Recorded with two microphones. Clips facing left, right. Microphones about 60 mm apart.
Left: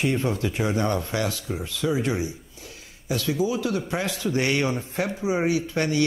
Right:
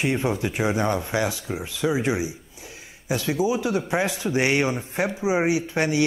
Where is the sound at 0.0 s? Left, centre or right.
Centre.